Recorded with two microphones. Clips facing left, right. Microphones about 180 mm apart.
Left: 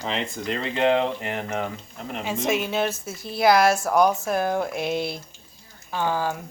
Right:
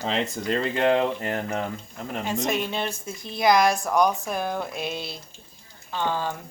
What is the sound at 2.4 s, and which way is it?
Speech, centre (ahead or behind).